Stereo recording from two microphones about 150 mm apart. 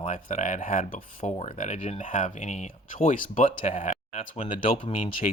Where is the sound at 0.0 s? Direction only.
55° left (ahead or behind).